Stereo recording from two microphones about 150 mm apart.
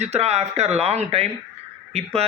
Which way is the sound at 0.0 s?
45° right (ahead or behind).